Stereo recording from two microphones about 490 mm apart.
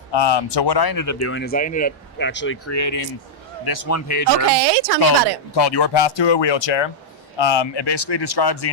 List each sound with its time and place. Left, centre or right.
0.1 s speech: left
1.3 s speech: centre; by 4.4 s left
4.4 s speech: right
5.5 s speech: left